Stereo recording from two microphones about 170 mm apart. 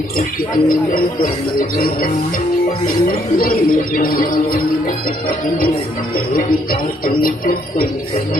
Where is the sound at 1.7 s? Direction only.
55° left (ahead or behind).